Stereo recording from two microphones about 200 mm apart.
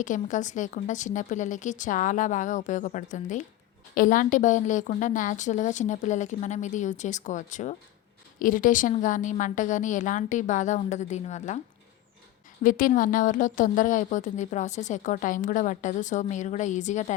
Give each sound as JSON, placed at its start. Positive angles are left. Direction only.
{"t": 0.0, "sound": "speech", "side_deg": 40}
{"t": 12.6, "sound": "speech", "side_deg": 40}